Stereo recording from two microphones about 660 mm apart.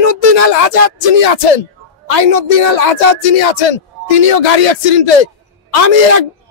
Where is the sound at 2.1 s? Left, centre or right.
Left.